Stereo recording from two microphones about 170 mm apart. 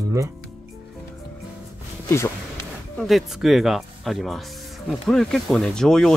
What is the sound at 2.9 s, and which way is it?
Speech, centre (ahead or behind).